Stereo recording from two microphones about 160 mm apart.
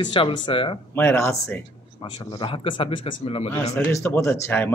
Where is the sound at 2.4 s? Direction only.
35° left (ahead or behind).